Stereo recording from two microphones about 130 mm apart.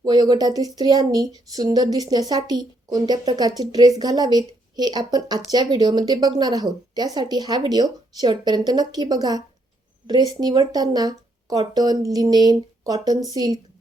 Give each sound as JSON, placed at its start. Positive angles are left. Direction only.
{"t": 0.0, "sound": "a woman's voice", "side_deg": -35}